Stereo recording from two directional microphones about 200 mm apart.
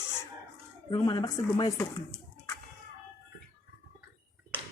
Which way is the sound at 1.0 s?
20° left (ahead or behind).